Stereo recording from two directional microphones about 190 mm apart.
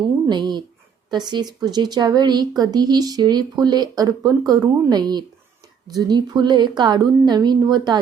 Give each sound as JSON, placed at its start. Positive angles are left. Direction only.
{"t": 0.3, "sound": "speech", "side_deg": -25}